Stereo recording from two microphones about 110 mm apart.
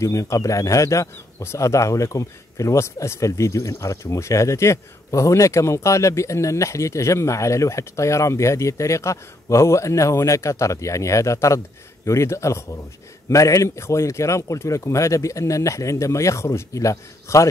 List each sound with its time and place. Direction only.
0.0 s speech: 30° left (ahead or behind)